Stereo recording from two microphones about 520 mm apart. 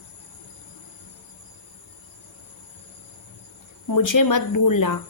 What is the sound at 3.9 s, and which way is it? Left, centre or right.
Speech, left.